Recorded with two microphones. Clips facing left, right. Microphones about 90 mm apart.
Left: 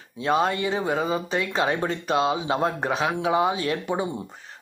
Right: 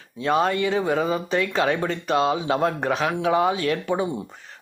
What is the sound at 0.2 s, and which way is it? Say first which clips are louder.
Speech: right 2 dB; 25° left (ahead or behind).